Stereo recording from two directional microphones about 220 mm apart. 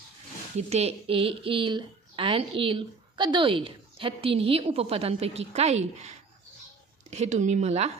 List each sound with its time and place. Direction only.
0.5 s a woman's voice: 30° right (ahead or behind)
7.2 s speech: 30° right (ahead or behind)